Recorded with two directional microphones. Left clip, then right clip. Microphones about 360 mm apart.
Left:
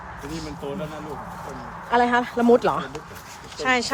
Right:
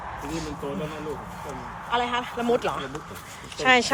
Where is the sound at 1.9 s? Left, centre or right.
Centre.